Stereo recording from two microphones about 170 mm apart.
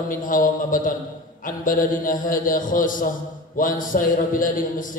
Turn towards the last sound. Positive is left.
turn(degrees=50)  # may be behind; listen again after turning